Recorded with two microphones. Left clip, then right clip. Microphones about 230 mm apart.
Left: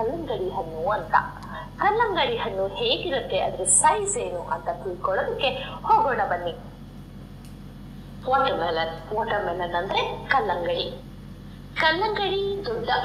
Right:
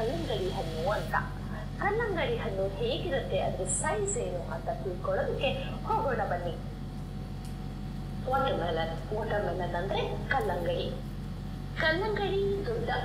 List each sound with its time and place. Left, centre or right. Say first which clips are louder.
0.8 s a woman's voice: left 9 dB; left
8.3 s a woman's voice: left 7 dB; left